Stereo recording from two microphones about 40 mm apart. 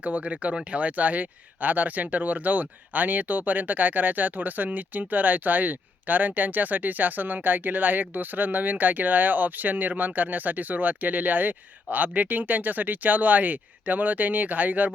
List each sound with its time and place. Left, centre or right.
0.0 s speech: right